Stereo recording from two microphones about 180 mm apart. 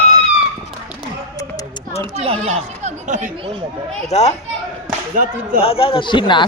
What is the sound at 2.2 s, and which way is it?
Speech, 35° right (ahead or behind).